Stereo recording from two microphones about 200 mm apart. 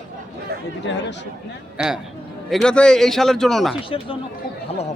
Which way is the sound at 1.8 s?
5° right (ahead or behind).